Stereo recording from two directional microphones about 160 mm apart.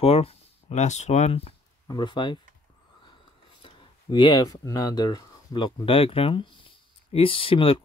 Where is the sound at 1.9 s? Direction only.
30° left (ahead or behind).